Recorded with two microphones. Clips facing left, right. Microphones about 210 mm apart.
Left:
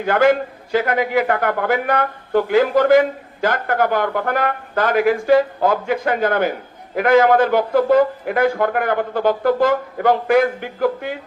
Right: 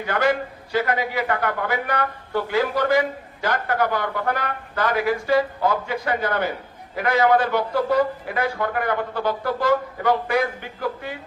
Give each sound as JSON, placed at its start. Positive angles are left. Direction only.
{"t": 0.1, "sound": "a man's voice", "side_deg": 50}